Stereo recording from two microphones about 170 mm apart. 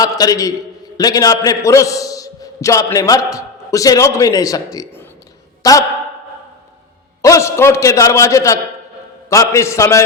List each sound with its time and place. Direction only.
0.0 s a man's voice: 20° left (ahead or behind)
7.2 s a man's voice: 20° left (ahead or behind)